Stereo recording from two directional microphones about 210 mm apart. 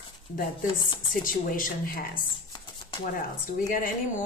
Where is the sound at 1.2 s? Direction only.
40° left (ahead or behind).